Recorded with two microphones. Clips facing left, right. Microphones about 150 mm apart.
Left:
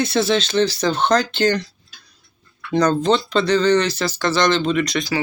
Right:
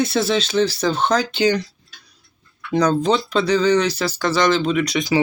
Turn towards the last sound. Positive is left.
turn(degrees=-10)  # may be behind; listen again after turning